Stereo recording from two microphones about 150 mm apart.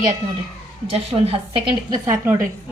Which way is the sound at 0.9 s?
40° right (ahead or behind).